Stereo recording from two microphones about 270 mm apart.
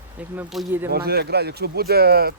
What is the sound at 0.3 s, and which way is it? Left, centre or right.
Speech, centre.